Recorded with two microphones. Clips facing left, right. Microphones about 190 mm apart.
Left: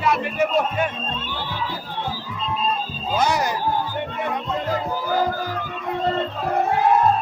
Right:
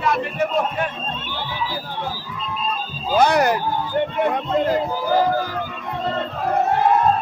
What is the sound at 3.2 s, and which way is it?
Speech, 65° right (ahead or behind).